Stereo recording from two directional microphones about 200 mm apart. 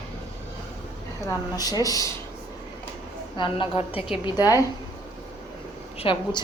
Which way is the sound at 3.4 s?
25° left (ahead or behind).